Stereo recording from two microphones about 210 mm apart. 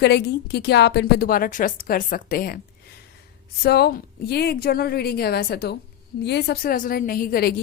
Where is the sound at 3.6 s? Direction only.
50° left (ahead or behind).